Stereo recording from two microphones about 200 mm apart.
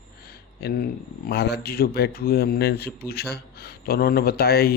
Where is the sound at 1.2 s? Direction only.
55° left (ahead or behind).